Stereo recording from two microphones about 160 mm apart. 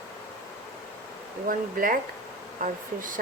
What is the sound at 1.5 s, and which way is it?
Speech, 60° right (ahead or behind).